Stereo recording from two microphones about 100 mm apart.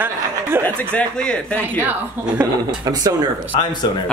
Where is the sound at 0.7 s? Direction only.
10° left (ahead or behind).